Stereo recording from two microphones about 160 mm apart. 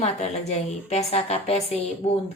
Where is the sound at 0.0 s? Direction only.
45° left (ahead or behind).